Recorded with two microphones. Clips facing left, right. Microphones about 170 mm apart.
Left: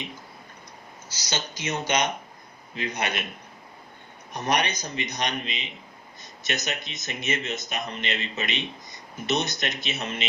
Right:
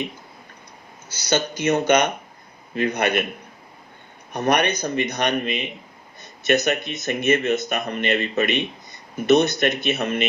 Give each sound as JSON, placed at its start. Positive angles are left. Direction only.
{"t": 1.1, "sound": "speech", "side_deg": -55}
{"t": 4.3, "sound": "speech", "side_deg": -55}